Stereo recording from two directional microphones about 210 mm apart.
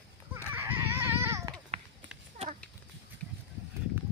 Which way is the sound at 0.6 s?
10° right (ahead or behind).